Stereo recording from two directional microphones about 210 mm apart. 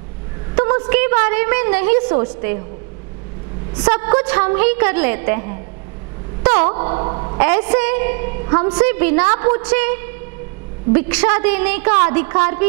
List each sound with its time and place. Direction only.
0.6 s a sound: 20° right (ahead or behind)
2.0 s a woman's voice: 20° right (ahead or behind)
4.2 s a woman's voice: 10° right (ahead or behind)
6.4 s a sound: 30° right (ahead or behind)
7.4 s a woman's voice: 10° right (ahead or behind)
8.8 s a woman's voice: 10° right (ahead or behind)